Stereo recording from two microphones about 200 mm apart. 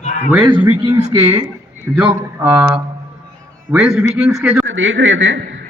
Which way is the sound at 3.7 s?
5° right (ahead or behind).